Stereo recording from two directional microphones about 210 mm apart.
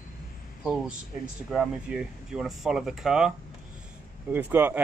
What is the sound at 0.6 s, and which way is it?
Speech, 5° right (ahead or behind).